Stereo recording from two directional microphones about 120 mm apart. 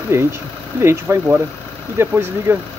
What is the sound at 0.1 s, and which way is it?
Speech, 20° right (ahead or behind).